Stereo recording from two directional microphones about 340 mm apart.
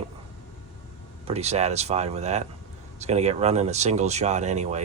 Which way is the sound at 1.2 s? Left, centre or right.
Centre.